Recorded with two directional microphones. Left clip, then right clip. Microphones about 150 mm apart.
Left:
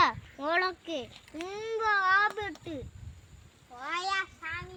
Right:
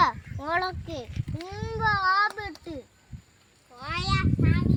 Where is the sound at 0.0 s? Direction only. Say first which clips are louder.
Right 2 dB; 55° left (ahead or behind).